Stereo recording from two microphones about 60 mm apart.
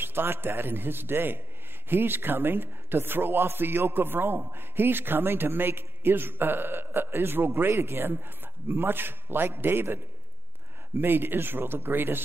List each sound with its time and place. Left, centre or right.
0.0 s a man's voice: right
11.0 s a man's voice: right